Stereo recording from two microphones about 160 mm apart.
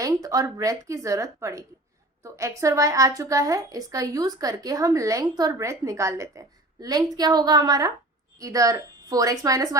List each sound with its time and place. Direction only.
0.0 s a woman's voice: 20° right (ahead or behind)